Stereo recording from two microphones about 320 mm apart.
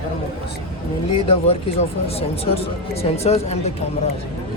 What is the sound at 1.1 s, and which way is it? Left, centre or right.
Speech, centre.